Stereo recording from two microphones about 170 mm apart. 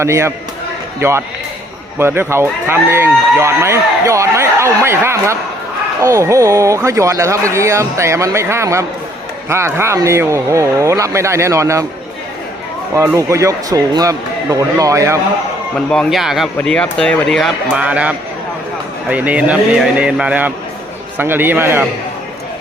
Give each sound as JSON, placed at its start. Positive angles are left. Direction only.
{"t": 0.0, "sound": "a man's voice", "side_deg": -15}
{"t": 12.9, "sound": "a man's voice", "side_deg": -15}
{"t": 15.9, "sound": "a man's voice", "side_deg": 0}